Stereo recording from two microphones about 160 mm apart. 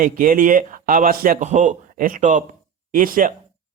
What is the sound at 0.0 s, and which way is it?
Speech, 60° right (ahead or behind).